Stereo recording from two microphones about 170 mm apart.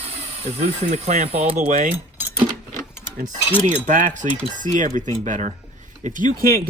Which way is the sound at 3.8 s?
45° right (ahead or behind).